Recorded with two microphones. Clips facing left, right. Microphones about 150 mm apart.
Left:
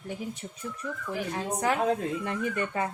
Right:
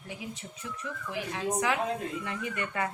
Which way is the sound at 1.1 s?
45° left (ahead or behind).